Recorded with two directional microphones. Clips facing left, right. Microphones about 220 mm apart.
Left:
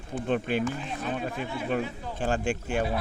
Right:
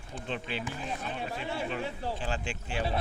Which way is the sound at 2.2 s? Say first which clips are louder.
Left 8 dB; 50° left (ahead or behind).